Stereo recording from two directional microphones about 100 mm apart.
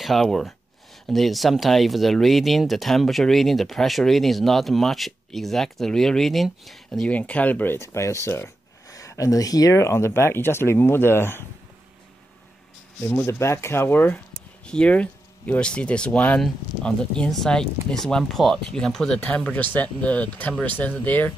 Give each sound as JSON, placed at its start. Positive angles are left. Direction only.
{"t": 0.0, "sound": "speech", "side_deg": 0}
{"t": 13.0, "sound": "speech", "side_deg": 20}